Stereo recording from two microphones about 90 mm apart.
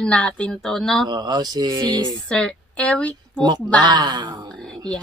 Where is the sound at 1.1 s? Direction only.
55° right (ahead or behind).